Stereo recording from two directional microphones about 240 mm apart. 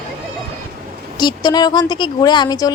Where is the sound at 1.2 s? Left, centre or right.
Centre.